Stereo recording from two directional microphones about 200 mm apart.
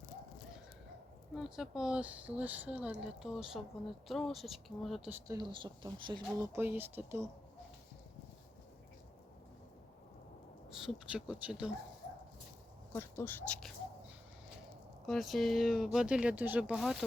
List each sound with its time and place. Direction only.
1.4 s speech: 5° right (ahead or behind)
5.3 s speech: 20° right (ahead or behind)
10.8 s speech: 5° right (ahead or behind)
12.9 s speech: 10° left (ahead or behind)
15.0 s speech: centre (ahead or behind)